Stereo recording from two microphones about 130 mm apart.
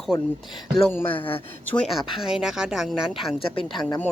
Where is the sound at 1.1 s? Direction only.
45° left (ahead or behind).